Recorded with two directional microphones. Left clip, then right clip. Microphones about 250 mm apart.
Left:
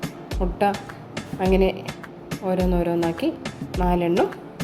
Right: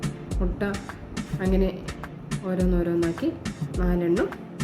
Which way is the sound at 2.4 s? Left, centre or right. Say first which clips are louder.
Left 4 dB; centre.